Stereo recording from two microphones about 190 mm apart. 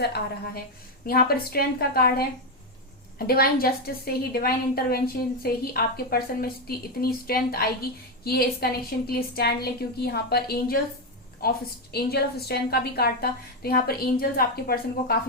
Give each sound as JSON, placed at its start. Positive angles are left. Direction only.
{"t": 0.0, "sound": "a woman's voice", "side_deg": 60}